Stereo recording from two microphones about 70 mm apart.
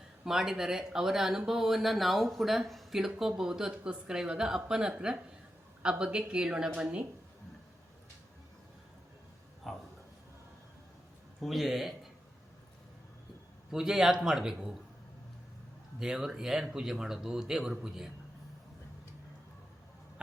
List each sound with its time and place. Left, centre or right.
0.3 s speech: centre
9.7 s a sound: centre
11.3 s a man's voice: centre
13.7 s speech: centre
16.0 s speech: centre